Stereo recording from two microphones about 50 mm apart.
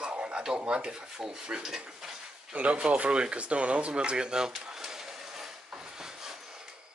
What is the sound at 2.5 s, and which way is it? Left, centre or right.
Speech, right.